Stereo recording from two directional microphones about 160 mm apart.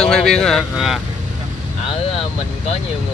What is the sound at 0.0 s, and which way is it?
Speech, 5° left (ahead or behind).